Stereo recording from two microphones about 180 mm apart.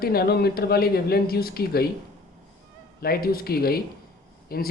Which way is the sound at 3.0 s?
55° left (ahead or behind).